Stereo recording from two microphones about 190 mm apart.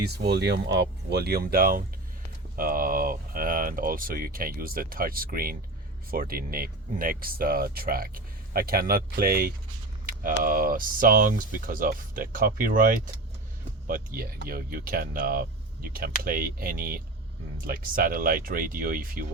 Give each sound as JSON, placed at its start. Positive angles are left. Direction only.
{"t": 0.1, "sound": "speech", "side_deg": -65}